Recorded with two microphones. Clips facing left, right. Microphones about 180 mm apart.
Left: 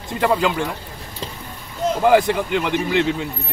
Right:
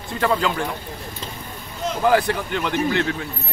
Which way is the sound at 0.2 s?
10° left (ahead or behind).